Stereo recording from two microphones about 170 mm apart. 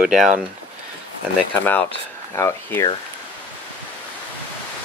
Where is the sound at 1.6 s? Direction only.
10° left (ahead or behind).